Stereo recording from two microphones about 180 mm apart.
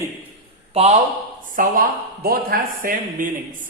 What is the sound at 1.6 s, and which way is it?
A man's voice, 50° right (ahead or behind).